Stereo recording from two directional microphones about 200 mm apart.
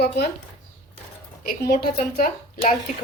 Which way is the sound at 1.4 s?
50° left (ahead or behind).